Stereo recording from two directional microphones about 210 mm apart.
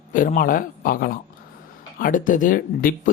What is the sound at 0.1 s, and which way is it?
Speech, 40° left (ahead or behind).